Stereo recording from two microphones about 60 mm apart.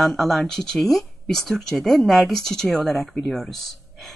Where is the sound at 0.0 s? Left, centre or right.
Centre.